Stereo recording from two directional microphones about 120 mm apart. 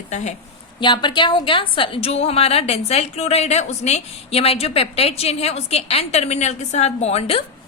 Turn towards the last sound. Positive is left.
turn(degrees=55)  # may be behind; listen again after turning